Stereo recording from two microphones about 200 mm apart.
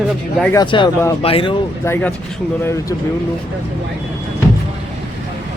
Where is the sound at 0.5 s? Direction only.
20° left (ahead or behind).